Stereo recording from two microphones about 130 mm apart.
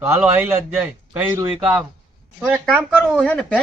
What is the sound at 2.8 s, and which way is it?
Speech, 10° right (ahead or behind).